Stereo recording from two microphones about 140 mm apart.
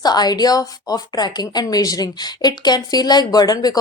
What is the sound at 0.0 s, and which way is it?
A woman's voice, 30° left (ahead or behind).